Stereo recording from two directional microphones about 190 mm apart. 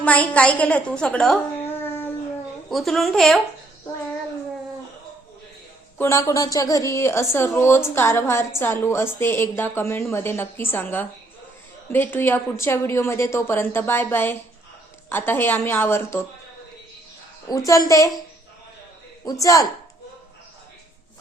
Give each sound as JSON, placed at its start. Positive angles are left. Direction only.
{"t": 0.0, "sound": "a woman's voice", "side_deg": 5}
{"t": 2.6, "sound": "speech", "side_deg": 0}
{"t": 6.0, "sound": "a woman's voice", "side_deg": 15}
{"t": 17.7, "sound": "a woman's voice", "side_deg": 15}
{"t": 19.2, "sound": "speech", "side_deg": 20}